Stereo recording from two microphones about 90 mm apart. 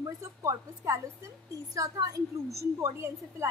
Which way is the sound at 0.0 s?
35° right (ahead or behind).